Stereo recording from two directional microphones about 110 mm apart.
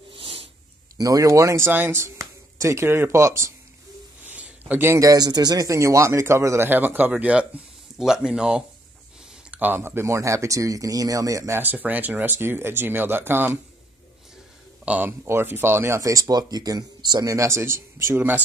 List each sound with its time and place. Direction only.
0.1 s a sound: 55° right (ahead or behind)
0.9 s a man's voice: 30° right (ahead or behind)
4.3 s a man's voice: 15° right (ahead or behind)
14.9 s a man's voice: 15° right (ahead or behind)